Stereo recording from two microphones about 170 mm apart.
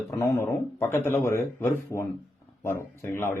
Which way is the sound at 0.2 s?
15° left (ahead or behind).